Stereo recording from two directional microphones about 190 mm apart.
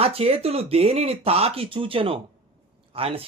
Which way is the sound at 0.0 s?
30° right (ahead or behind).